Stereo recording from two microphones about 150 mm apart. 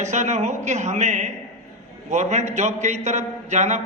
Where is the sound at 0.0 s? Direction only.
50° right (ahead or behind).